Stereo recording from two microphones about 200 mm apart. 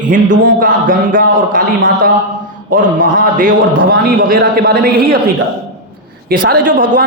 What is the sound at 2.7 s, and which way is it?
A woman's voice, 45° right (ahead or behind).